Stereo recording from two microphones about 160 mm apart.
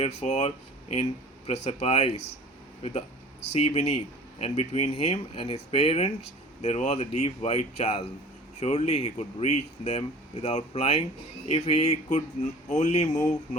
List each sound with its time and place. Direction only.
0.2 s speech: 45° left (ahead or behind)
3.5 s speech: 45° left (ahead or behind)